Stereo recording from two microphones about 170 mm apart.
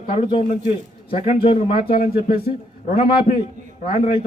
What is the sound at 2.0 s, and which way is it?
Speech, 60° left (ahead or behind).